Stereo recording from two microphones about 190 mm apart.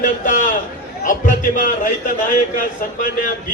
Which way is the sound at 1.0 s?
45° left (ahead or behind).